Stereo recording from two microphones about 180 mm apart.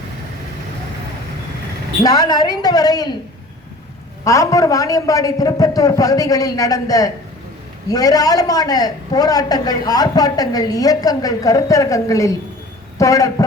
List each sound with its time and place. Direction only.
2.0 s a man's voice: 20° left (ahead or behind)
4.2 s a man's voice: 15° left (ahead or behind)